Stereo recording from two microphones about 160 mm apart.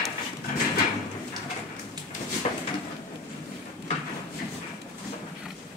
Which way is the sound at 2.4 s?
40° left (ahead or behind).